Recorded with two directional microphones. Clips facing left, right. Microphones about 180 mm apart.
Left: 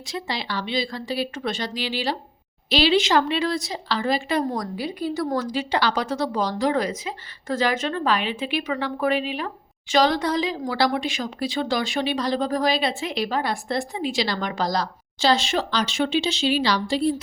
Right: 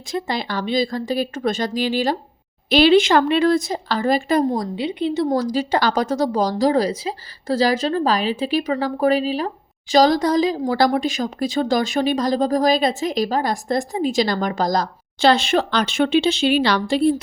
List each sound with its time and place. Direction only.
0.1 s speech: 50° right (ahead or behind)
4.5 s a woman's voice: 25° right (ahead or behind)
5.3 s a woman's voice: 40° right (ahead or behind); by 17.2 s 60° right (ahead or behind)